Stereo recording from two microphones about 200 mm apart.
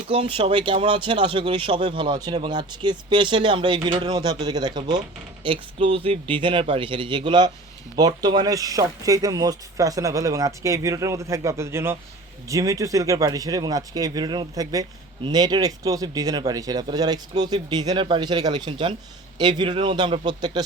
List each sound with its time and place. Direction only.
0.1 s speech: 25° right (ahead or behind)